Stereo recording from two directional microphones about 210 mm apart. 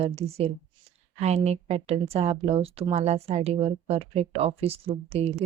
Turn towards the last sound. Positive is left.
turn(degrees=-30)  # may be behind; listen again after turning